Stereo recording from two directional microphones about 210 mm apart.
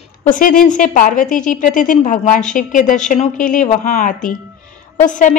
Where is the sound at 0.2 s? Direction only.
40° left (ahead or behind).